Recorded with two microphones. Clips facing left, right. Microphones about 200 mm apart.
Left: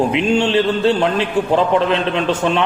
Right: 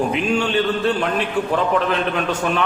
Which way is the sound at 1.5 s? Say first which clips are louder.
Left 5 dB; 30° left (ahead or behind).